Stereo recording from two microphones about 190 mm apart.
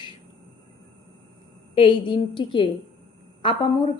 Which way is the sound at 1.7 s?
25° left (ahead or behind).